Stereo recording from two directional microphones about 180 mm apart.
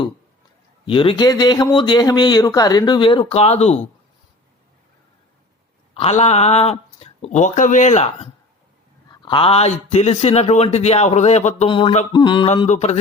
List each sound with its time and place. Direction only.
0.9 s a man's voice: 30° left (ahead or behind)
5.9 s a man's voice: 35° left (ahead or behind)
12.6 s a man's voice: 40° left (ahead or behind)